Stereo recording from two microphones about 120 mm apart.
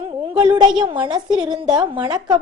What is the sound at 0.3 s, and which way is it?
A woman's voice, 40° right (ahead or behind).